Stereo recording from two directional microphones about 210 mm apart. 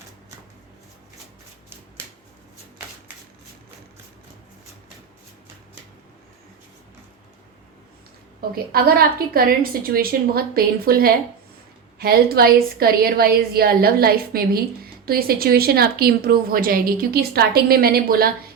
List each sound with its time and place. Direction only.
8.4 s a woman's voice: 45° right (ahead or behind)